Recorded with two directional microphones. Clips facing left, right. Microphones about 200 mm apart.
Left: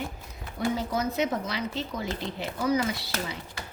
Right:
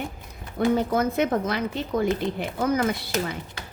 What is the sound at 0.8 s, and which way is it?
Speech, 55° right (ahead or behind).